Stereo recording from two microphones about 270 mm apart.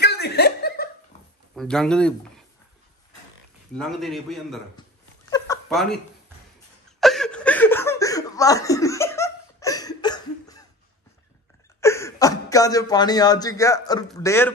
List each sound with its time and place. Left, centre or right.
0.0 s chuckle: left
1.5 s speech: centre
3.7 s a man's voice: centre
5.7 s a man's voice: centre
7.0 s chuckle: centre
11.8 s a man's voice: centre